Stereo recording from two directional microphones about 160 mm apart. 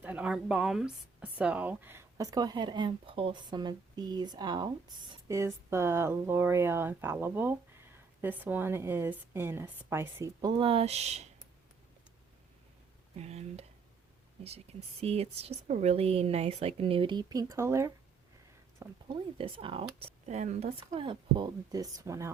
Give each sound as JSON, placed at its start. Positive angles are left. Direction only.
{"t": 0.0, "sound": "speech", "side_deg": -10}
{"t": 10.6, "sound": "speech", "side_deg": -35}
{"t": 13.1, "sound": "a woman's voice", "side_deg": -40}
{"t": 19.0, "sound": "a woman's voice", "side_deg": -30}